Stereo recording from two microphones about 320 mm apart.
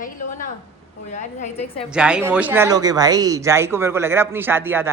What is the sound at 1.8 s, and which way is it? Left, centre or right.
Speech, centre.